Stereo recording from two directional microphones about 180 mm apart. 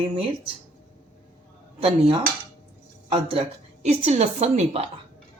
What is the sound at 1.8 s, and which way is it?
A woman's voice, 30° right (ahead or behind).